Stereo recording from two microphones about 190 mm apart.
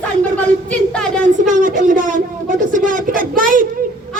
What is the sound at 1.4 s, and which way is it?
Speech, 45° right (ahead or behind).